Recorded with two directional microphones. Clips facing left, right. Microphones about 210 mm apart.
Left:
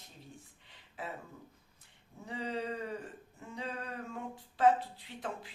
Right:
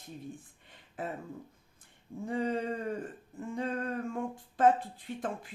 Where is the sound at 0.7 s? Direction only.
50° right (ahead or behind).